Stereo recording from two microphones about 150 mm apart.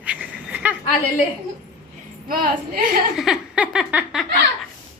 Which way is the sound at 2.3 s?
70° right (ahead or behind).